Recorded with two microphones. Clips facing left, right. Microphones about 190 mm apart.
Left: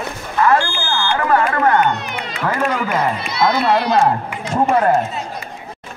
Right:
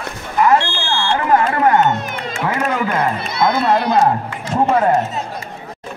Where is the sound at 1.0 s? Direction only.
25° right (ahead or behind).